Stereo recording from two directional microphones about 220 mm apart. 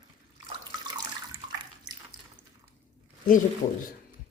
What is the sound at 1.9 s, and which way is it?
Water, 20° right (ahead or behind).